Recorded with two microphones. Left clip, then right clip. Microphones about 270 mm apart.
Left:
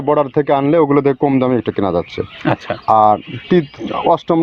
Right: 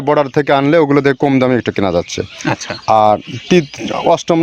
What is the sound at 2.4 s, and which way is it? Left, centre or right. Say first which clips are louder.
Speech: left 2 dB; centre.